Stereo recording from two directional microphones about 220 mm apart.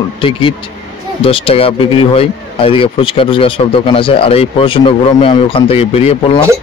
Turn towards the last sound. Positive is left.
turn(degrees=30)  # may be behind; listen again after turning